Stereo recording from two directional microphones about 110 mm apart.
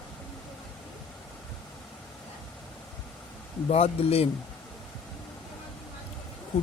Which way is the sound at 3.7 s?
65° left (ahead or behind).